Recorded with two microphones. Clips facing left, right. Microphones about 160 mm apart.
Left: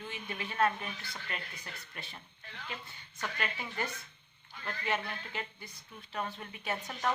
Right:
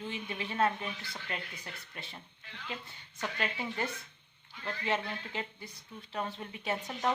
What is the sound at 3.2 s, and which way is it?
Speech, 25° right (ahead or behind).